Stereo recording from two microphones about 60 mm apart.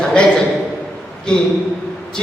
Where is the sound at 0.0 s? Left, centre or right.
Centre.